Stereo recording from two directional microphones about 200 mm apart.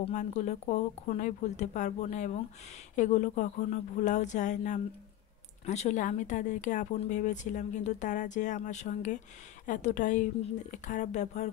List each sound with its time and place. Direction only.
0.0 s speech: 35° left (ahead or behind)